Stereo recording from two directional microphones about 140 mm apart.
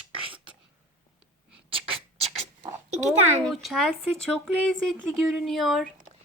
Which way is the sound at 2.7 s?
55° right (ahead or behind).